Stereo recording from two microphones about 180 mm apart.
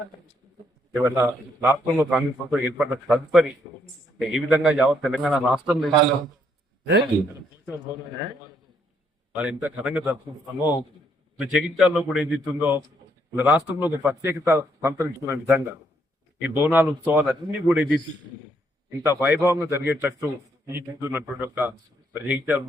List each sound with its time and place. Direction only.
1.0 s a man's voice: 10° right (ahead or behind)
9.3 s a man's voice: 5° right (ahead or behind)
10.6 s speech: 20° left (ahead or behind)
11.3 s a man's voice: 5° right (ahead or behind)
16.6 s a man's voice: 10° right (ahead or behind)
19.0 s a man's voice: 15° right (ahead or behind)